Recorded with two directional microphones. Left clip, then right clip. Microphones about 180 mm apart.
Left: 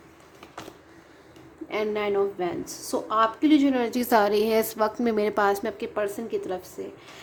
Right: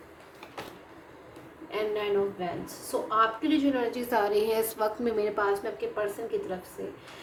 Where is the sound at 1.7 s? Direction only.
50° left (ahead or behind).